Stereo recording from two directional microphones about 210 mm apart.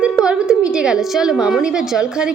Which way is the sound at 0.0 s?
5° right (ahead or behind).